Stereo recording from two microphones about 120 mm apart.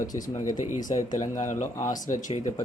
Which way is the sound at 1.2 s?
90° left.